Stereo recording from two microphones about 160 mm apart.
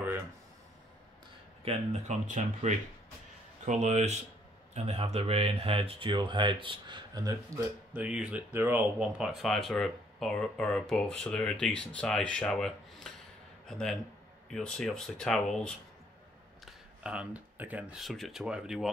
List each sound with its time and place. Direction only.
1.6 s speech: 40° right (ahead or behind); by 7.6 s 25° right (ahead or behind)
7.9 s speech: 10° right (ahead or behind)
17.0 s speech: 5° right (ahead or behind)